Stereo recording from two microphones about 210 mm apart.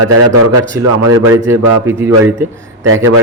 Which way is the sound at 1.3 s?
10° right (ahead or behind).